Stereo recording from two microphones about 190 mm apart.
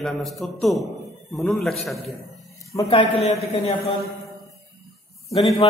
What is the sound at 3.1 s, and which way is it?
Speech, 35° left (ahead or behind).